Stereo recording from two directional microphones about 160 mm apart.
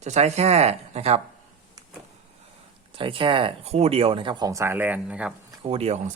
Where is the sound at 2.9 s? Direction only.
35° right (ahead or behind); by 5.3 s 10° right (ahead or behind).